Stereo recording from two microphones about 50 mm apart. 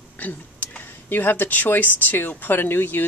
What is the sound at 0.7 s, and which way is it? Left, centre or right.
Speech, left.